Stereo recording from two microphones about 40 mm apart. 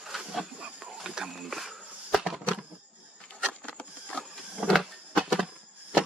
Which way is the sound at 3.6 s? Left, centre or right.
Left.